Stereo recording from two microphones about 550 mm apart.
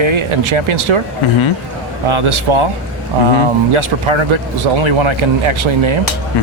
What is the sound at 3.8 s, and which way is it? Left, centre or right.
Speech, right.